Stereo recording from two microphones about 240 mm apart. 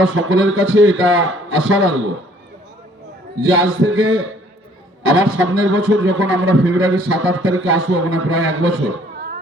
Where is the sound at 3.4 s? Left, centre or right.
Right.